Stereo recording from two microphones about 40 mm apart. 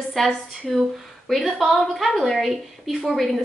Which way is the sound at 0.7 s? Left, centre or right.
Centre.